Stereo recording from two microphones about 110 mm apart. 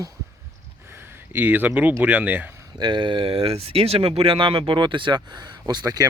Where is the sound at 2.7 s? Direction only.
45° right (ahead or behind).